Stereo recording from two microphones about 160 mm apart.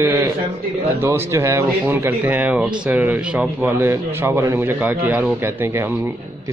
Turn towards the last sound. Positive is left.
turn(degrees=-10)  # may be behind; listen again after turning